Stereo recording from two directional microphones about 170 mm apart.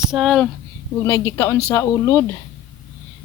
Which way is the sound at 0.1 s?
Centre (ahead or behind).